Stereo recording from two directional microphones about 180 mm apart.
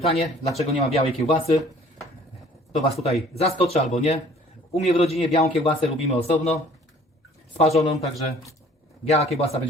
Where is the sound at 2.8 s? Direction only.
35° left (ahead or behind).